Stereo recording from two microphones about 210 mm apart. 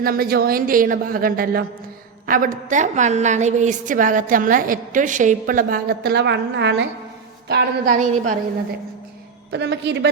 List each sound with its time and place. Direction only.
0.0 s a woman's voice: 45° right (ahead or behind)
7.9 s a woman's voice: 35° right (ahead or behind)
9.5 s a man's voice: 55° right (ahead or behind)